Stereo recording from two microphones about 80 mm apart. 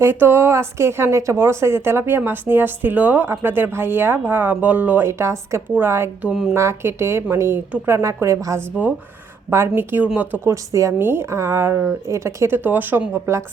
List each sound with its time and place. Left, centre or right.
0.0 s speech: right
5.0 s speech: right
10.4 s speech: right
10.9 s speech: right